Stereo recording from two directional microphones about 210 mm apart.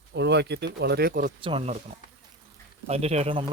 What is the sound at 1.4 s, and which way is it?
Speech, 25° right (ahead or behind).